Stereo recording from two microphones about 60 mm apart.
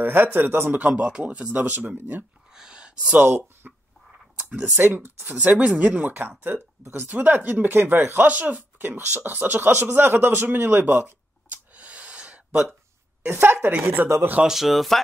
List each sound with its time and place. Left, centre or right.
0.0 s speech: right
0.8 s speech: right
2.5 s gasp: centre
3.2 s speech: right
4.5 s speech: right
4.7 s speech: right
6.1 s speech: right
8.3 s speech: right
13.2 s speech: right
14.4 s speech: centre